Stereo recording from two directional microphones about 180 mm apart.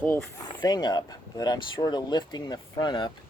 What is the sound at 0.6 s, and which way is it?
Speech, 25° left (ahead or behind).